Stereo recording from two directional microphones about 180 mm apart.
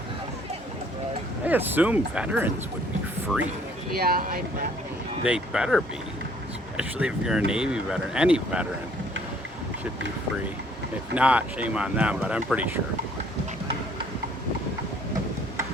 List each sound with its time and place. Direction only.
1.5 s speech: 10° right (ahead or behind)
3.9 s speech: 60° right (ahead or behind)
5.2 s speech: 5° right (ahead or behind)
11.1 s speech: 5° right (ahead or behind)